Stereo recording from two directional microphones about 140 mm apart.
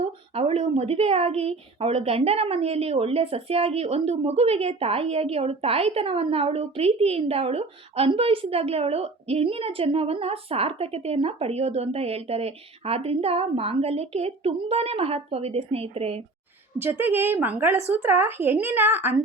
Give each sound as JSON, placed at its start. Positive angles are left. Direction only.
{"t": 0.0, "sound": "a woman's voice", "side_deg": -45}
{"t": 16.7, "sound": "speech", "side_deg": -15}